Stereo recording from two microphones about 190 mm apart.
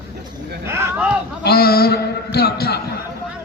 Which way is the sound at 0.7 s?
10° right (ahead or behind).